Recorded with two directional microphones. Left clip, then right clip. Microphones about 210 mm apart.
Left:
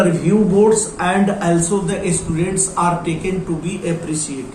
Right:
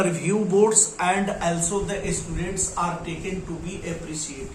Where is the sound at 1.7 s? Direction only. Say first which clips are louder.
Left 7 dB; 15° right (ahead or behind).